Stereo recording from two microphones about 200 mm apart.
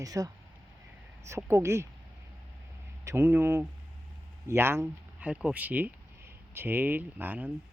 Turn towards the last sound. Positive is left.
turn(degrees=-10)  # may be behind; listen again after turning